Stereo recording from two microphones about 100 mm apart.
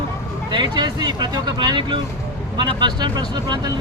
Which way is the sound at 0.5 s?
45° right (ahead or behind).